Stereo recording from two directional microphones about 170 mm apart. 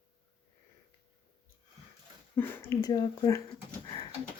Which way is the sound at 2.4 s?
15° left (ahead or behind).